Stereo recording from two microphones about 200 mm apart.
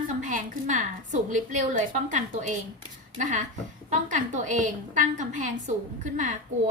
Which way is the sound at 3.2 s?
40° right (ahead or behind).